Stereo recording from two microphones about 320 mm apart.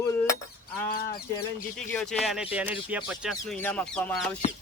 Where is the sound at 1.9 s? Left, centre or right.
Centre.